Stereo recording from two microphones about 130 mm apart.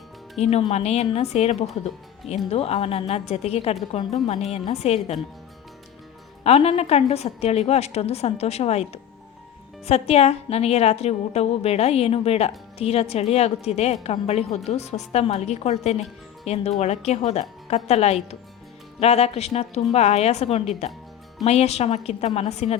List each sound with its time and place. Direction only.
0.4 s a woman's voice: 55° left (ahead or behind)
6.4 s a woman's voice: 50° left (ahead or behind)